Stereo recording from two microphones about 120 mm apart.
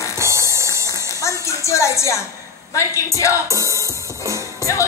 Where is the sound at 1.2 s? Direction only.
25° left (ahead or behind).